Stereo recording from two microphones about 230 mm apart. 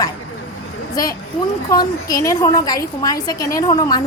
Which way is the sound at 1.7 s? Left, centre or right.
Centre.